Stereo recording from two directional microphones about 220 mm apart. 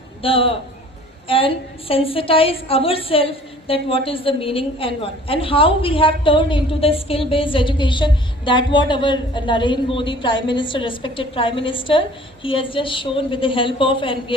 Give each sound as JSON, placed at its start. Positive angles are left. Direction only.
{"t": 0.2, "sound": "a woman's voice", "side_deg": 25}